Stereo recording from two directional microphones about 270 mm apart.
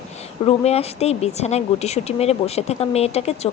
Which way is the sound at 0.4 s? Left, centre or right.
Left.